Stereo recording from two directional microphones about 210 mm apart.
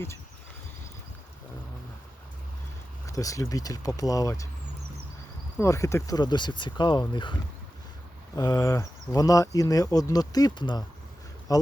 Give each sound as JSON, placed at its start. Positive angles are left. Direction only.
{"t": 3.1, "sound": "speech", "side_deg": 15}
{"t": 5.5, "sound": "speech", "side_deg": 15}
{"t": 8.4, "sound": "speech", "side_deg": 15}